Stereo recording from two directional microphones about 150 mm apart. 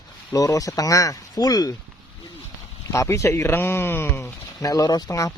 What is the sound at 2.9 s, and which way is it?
Speech, 20° left (ahead or behind).